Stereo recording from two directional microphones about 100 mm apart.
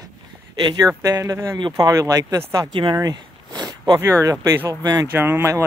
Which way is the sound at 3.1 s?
45° right (ahead or behind).